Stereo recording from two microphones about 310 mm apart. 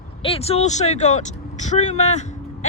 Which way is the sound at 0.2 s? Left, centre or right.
Centre.